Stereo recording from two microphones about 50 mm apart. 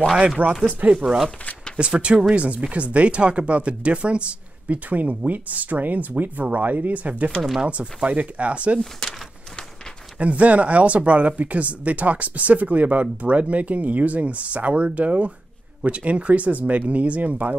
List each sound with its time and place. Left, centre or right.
0.4 s speech: right
0.9 s speech: centre
1.8 s speech: right
10.1 s speech: right